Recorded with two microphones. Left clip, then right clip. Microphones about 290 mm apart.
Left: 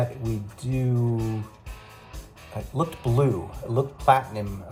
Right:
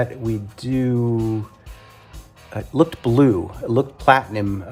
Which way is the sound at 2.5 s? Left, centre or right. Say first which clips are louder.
Right 10 dB; right.